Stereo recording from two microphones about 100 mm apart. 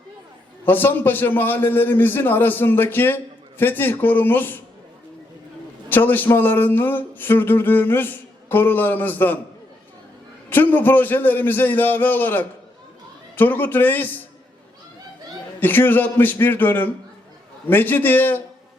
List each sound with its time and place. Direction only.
0.6 s speech: 20° left (ahead or behind)
5.9 s speech: 20° left (ahead or behind)
10.5 s speech: 20° left (ahead or behind)
15.6 s speech: 20° left (ahead or behind)